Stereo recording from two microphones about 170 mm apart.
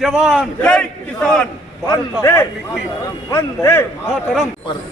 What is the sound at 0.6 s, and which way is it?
A man's voice, 5° left (ahead or behind).